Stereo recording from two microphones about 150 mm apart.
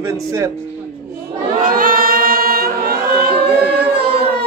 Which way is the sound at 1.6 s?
65° right (ahead or behind).